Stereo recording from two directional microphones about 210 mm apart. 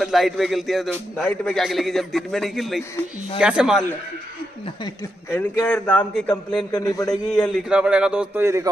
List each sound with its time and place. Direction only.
0.0 s speech: centre (ahead or behind)
4.8 s a man's voice: 15° left (ahead or behind)
6.7 s a man's voice: 15° left (ahead or behind)
7.1 s speech: 5° left (ahead or behind); by 8.6 s 10° right (ahead or behind)